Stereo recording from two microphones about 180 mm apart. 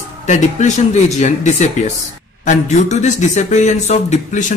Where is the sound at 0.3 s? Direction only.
40° left (ahead or behind).